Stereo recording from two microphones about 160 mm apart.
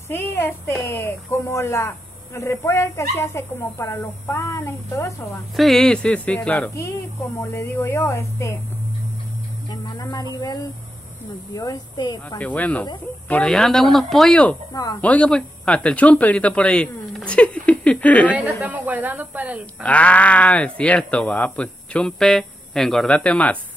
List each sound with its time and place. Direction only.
0.1 s a woman's voice: 15° left (ahead or behind)
5.6 s a woman's voice: centre (ahead or behind)
6.7 s a woman's voice: 20° left (ahead or behind)
9.7 s speech: 25° left (ahead or behind)
11.5 s speech: 20° left (ahead or behind)
12.4 s a woman's voice: 10° left (ahead or behind)
14.7 s speech: 25° left (ahead or behind)
15.0 s a woman's voice: 10° left (ahead or behind)
18.3 s speech: 10° right (ahead or behind)
19.8 s a woman's voice: 10° left (ahead or behind)